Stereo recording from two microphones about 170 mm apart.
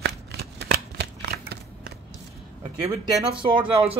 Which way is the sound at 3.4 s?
30° right (ahead or behind).